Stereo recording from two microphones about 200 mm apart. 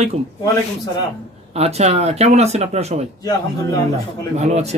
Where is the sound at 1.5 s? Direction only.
30° right (ahead or behind).